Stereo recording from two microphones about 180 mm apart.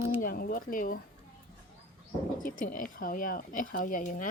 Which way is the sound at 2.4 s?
50° left (ahead or behind).